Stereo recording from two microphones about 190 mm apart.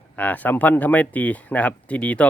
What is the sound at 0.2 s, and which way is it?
Speech, 10° left (ahead or behind).